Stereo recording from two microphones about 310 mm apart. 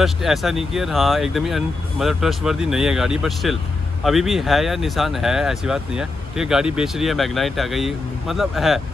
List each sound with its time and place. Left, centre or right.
0.0 s speech: centre